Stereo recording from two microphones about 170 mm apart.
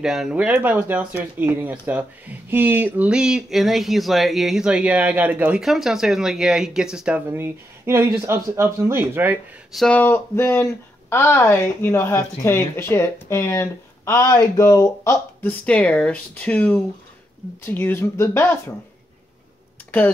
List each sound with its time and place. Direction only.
0.0 s speech: 5° right (ahead or behind); by 18.5 s 15° left (ahead or behind)